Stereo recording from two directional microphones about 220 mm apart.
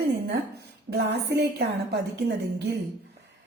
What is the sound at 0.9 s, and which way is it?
A woman's voice, 45° right (ahead or behind).